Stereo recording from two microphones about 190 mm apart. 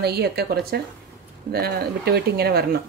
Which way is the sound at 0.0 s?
55° right (ahead or behind).